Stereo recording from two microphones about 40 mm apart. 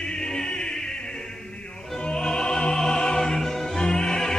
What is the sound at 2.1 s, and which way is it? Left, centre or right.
Music, centre.